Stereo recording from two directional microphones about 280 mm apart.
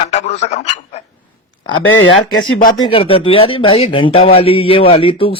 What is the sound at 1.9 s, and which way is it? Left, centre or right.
Speech, left.